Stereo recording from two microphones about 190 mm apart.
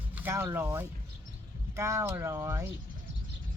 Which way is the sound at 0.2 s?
10° right (ahead or behind).